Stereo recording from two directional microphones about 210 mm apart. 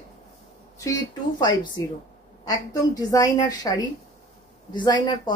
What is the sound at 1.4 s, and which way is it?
A woman's voice, 20° left (ahead or behind).